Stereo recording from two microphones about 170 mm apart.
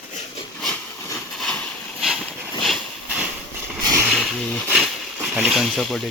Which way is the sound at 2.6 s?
Centre (ahead or behind).